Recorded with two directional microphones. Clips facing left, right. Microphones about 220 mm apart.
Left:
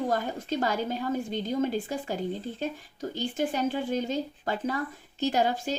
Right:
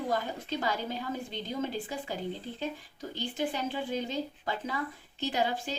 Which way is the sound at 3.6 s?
45° left (ahead or behind).